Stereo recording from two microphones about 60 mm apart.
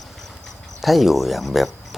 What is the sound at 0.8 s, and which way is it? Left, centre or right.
Speech, centre.